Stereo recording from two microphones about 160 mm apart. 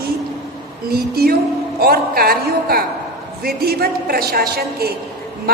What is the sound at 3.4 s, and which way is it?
A woman's voice, 75° right (ahead or behind).